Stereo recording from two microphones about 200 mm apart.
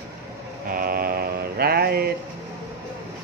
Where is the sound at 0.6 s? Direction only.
45° right (ahead or behind).